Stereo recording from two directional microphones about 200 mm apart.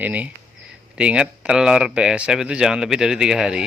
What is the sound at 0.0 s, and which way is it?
Speech, 10° right (ahead or behind).